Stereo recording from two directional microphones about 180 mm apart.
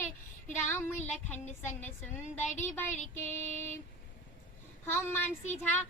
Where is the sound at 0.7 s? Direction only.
15° left (ahead or behind).